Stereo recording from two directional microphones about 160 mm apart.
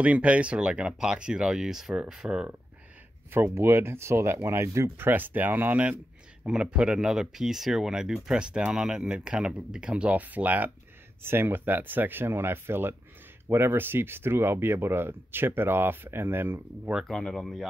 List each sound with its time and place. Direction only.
0.0 s speech: 10° right (ahead or behind)
17.1 s speech: 5° left (ahead or behind)